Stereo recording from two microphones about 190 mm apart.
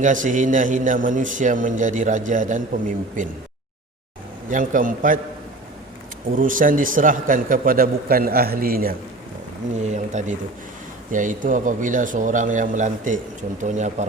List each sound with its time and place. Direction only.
0.0 s a man's voice: 40° right (ahead or behind)
4.4 s a man's voice: 45° right (ahead or behind)
6.3 s a man's voice: 45° right (ahead or behind)
9.8 s a man's voice: 40° right (ahead or behind)